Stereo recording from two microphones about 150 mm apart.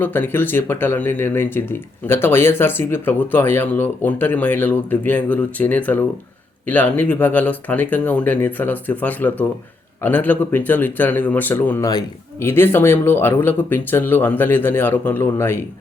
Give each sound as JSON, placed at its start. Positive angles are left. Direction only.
{"t": 0.0, "sound": "speech", "side_deg": 15}